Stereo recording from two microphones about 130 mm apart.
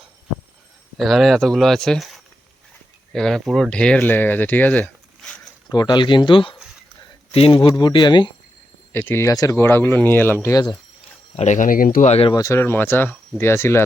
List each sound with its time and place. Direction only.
0.9 s speech: centre (ahead or behind)
5.6 s speech: 30° left (ahead or behind)
7.7 s speech: 35° left (ahead or behind)
8.9 s speech: 15° left (ahead or behind)
11.3 s speech: 70° left (ahead or behind); by 12.1 s 90° left
12.3 s speech: 25° left (ahead or behind)